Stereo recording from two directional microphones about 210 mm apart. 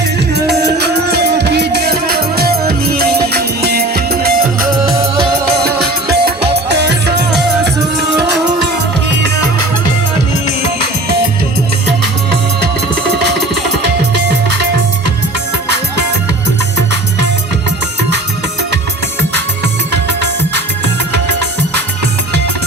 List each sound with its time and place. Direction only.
0.3 s music: 50° right (ahead or behind)